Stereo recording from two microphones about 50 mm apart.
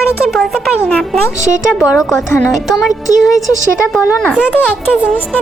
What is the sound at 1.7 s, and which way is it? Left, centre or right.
Speech, centre.